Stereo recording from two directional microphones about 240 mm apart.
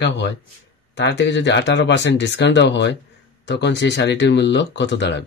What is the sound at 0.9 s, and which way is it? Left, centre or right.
Speech, left.